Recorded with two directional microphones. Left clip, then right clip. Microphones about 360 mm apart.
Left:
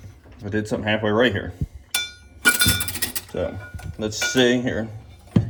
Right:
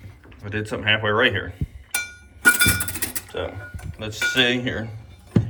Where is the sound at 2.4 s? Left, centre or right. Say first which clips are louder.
Right 2 dB; centre.